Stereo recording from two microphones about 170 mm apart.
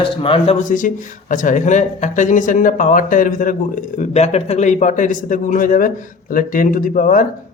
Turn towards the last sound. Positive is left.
turn(degrees=50)  # may be behind; listen again after turning